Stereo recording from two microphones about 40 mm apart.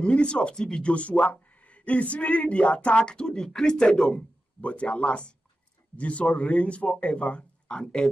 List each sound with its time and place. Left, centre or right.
0.0 s speech: left
4.6 s speech: left